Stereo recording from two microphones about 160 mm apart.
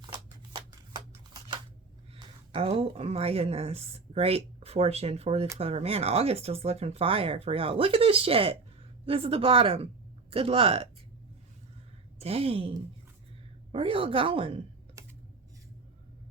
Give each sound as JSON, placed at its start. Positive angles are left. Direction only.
{"t": 0.5, "sound": "shuffling cards", "side_deg": -25}
{"t": 2.1, "sound": "speech", "side_deg": -35}
{"t": 12.2, "sound": "speech", "side_deg": -35}
{"t": 13.7, "sound": "speech", "side_deg": -35}
{"t": 15.0, "sound": "computer keyboard", "side_deg": -20}